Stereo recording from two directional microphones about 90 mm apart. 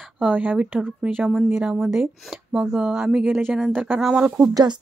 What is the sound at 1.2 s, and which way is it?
Speech, centre (ahead or behind).